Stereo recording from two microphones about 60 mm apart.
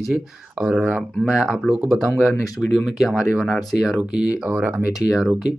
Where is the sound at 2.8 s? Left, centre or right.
Centre.